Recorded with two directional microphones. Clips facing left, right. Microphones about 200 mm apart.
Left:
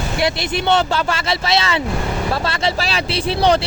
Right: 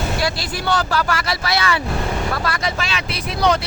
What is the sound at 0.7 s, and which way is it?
Speech, 25° left (ahead or behind).